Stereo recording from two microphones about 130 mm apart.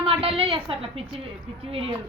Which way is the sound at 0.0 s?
45° right (ahead or behind).